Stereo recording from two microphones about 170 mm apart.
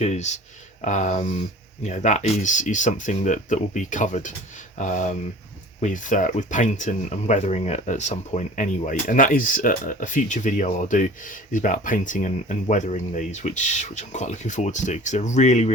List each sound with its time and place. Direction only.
0.0 s speech: 40° left (ahead or behind)